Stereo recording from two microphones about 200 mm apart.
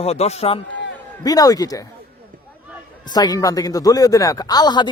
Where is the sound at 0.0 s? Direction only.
30° left (ahead or behind).